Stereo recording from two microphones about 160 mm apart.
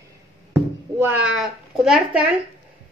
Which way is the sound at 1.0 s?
10° right (ahead or behind).